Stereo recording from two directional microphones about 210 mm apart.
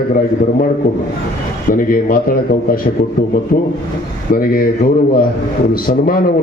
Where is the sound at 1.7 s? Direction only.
40° left (ahead or behind).